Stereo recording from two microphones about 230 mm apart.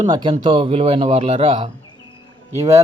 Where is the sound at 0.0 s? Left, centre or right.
Centre.